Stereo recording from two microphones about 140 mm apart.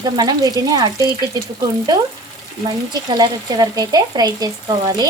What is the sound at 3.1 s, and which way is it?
Speech, 30° right (ahead or behind).